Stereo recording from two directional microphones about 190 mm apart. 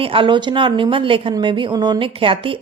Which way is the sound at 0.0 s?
30° right (ahead or behind).